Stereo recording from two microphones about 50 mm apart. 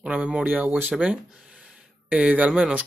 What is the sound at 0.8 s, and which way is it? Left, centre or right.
Speech, right.